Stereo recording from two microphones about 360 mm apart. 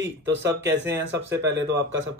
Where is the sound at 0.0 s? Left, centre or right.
Right.